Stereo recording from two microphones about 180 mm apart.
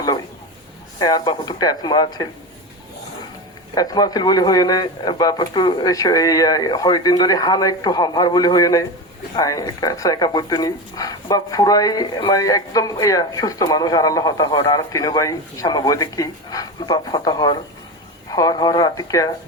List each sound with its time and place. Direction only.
0.9 s speech: 20° left (ahead or behind)
3.8 s speech: 20° left (ahead or behind)